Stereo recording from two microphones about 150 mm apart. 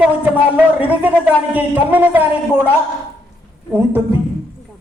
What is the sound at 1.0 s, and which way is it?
Speech, 10° right (ahead or behind).